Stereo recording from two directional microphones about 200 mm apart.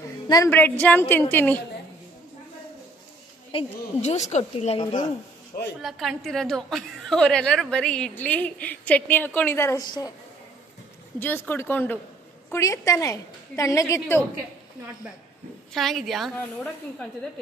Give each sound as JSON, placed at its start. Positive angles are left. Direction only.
{"t": 0.3, "sound": "a woman's voice", "side_deg": 15}
{"t": 3.5, "sound": "a woman's voice", "side_deg": 35}
{"t": 5.8, "sound": "a woman's voice", "side_deg": 0}
{"t": 11.1, "sound": "a woman's voice", "side_deg": 10}
{"t": 15.7, "sound": "a woman's voice", "side_deg": 0}